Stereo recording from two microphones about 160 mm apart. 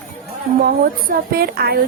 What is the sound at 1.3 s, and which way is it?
Speech, 75° right (ahead or behind).